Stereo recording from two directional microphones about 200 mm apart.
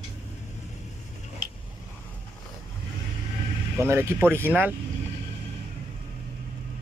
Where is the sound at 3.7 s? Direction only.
10° right (ahead or behind).